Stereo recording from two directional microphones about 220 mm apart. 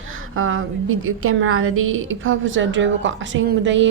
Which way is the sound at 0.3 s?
70° right (ahead or behind).